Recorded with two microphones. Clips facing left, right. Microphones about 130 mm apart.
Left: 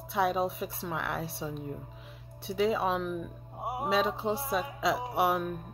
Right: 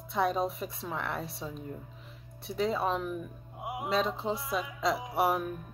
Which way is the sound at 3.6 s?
40° left (ahead or behind).